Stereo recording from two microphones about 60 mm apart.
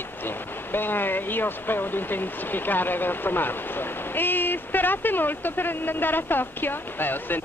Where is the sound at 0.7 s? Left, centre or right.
Left.